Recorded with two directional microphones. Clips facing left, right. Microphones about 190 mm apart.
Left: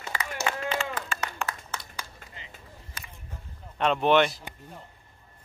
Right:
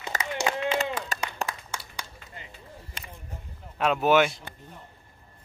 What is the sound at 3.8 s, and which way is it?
Speech, 5° right (ahead or behind).